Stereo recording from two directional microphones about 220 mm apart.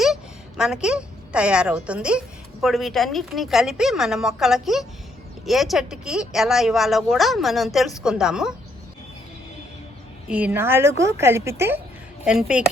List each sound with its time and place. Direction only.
0.0 s a woman's voice: centre (ahead or behind)
10.2 s speech: 5° right (ahead or behind)